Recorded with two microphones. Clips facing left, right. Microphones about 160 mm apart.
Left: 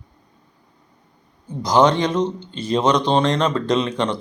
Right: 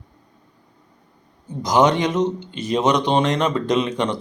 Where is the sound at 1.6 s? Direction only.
15° right (ahead or behind).